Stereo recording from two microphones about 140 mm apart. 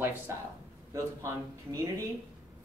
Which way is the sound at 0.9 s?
20° right (ahead or behind).